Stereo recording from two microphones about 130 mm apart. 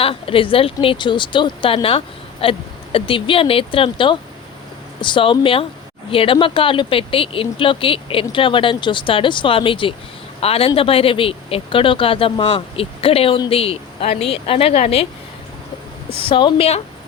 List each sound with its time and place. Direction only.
0.0 s speech: 45° left (ahead or behind)
16.1 s speech: 40° left (ahead or behind)